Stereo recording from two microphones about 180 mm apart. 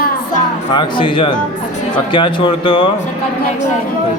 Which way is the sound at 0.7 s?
25° left (ahead or behind).